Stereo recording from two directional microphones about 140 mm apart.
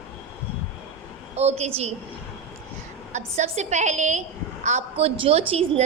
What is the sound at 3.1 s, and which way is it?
A woman's voice, 55° right (ahead or behind).